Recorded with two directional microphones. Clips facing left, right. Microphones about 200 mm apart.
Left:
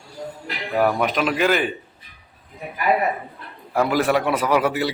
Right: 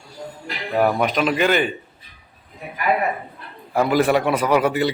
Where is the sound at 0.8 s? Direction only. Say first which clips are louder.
Right 1 dB; centre (ahead or behind).